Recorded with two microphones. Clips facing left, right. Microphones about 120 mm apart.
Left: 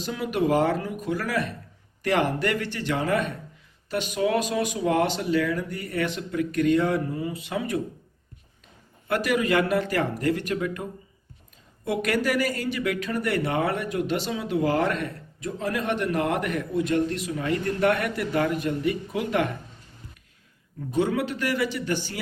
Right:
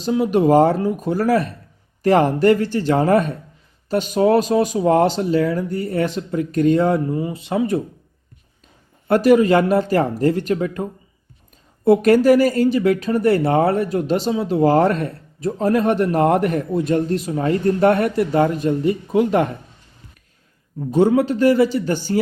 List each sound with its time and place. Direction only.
0.0 s speech: 30° right (ahead or behind)
9.0 s speech: 35° right (ahead or behind)
11.9 s speech: 35° right (ahead or behind)
20.9 s speech: 35° right (ahead or behind)